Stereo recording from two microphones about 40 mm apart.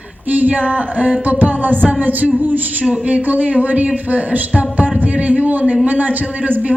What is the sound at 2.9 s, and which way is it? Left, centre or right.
Music, right.